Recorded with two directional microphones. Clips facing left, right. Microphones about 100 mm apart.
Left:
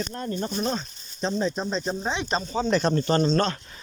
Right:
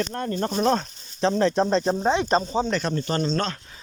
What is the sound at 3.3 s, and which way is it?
Speech, 5° left (ahead or behind).